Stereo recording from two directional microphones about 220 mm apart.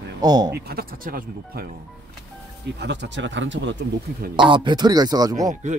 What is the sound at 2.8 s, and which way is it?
Speech, 50° right (ahead or behind).